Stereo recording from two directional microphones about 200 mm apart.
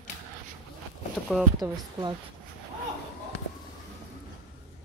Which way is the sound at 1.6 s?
20° right (ahead or behind).